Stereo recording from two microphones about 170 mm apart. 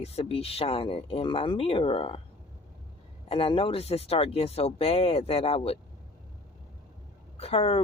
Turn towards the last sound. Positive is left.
turn(degrees=35)  # may be behind; listen again after turning